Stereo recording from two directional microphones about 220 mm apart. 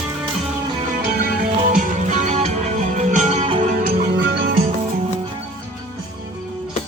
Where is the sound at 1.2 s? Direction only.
35° right (ahead or behind).